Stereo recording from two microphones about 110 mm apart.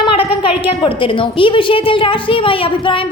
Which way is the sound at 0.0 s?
50° left (ahead or behind).